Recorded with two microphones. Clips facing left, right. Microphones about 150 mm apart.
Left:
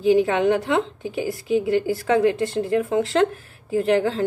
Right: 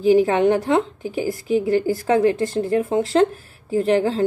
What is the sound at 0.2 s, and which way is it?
A woman's voice, 40° right (ahead or behind).